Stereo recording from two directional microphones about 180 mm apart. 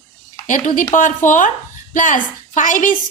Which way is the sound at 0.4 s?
45° left (ahead or behind).